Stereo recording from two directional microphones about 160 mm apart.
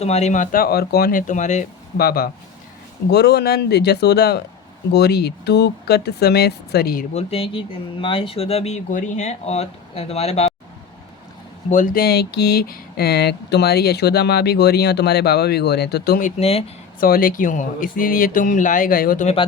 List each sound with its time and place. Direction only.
0.0 s speech: 45° left (ahead or behind)
2.0 s speech: 70° left (ahead or behind)
3.1 s speech: 90° left
7.1 s speech: 40° left (ahead or behind)
11.7 s speech: 55° left (ahead or behind); by 16.2 s 85° left
16.2 s speech: 40° left (ahead or behind)
17.0 s speech: 65° left (ahead or behind)